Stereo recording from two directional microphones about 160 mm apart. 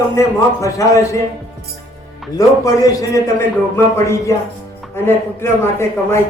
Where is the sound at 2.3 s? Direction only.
20° left (ahead or behind).